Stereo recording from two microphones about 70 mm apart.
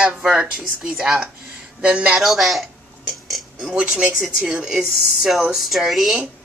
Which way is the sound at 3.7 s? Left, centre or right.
Centre.